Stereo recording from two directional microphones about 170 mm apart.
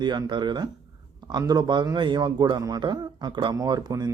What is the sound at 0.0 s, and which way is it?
Speech, 25° right (ahead or behind).